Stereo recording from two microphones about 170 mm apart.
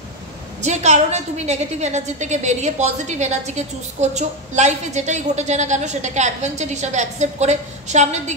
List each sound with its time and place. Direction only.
0.6 s a woman's voice: 40° right (ahead or behind)